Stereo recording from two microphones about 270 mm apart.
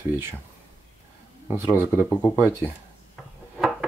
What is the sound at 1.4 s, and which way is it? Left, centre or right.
Speech, centre.